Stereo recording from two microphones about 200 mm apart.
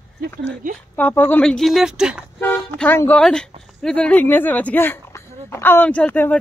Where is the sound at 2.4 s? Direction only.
10° left (ahead or behind).